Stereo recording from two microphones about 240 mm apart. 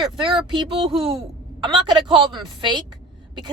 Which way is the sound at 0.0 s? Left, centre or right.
Centre.